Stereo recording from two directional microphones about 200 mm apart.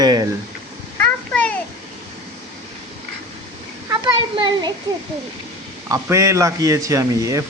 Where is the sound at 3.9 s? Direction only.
20° right (ahead or behind).